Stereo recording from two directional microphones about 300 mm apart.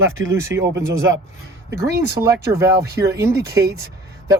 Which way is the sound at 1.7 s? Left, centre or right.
Right.